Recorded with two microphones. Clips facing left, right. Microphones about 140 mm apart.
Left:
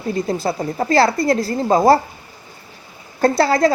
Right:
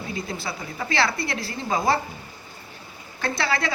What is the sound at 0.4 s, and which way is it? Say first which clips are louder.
A woman's voice: left 11 dB; 45° left (ahead or behind).